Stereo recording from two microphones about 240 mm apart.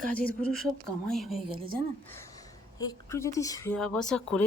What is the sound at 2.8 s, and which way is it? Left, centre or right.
Speech, centre.